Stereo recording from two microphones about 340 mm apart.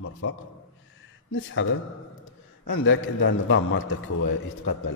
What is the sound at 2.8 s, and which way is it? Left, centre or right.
Speech, left.